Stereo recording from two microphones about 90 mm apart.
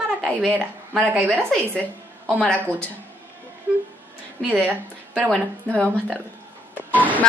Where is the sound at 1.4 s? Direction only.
15° left (ahead or behind).